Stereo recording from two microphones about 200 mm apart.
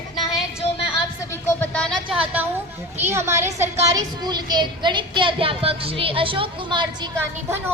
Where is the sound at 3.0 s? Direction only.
15° right (ahead or behind).